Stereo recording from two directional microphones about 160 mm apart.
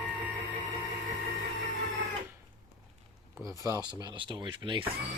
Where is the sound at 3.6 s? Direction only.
20° right (ahead or behind).